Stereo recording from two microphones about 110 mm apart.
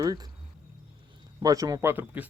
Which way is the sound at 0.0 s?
35° right (ahead or behind).